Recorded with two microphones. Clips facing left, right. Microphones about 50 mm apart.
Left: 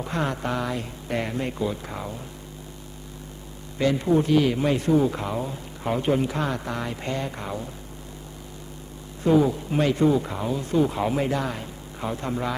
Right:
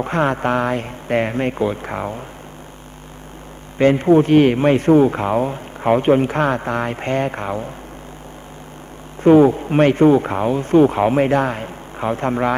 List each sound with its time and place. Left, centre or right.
0.0 s a man's voice: right
3.8 s a man's voice: right
9.2 s a man's voice: right